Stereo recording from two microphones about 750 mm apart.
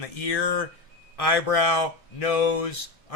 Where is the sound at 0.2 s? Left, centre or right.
Left.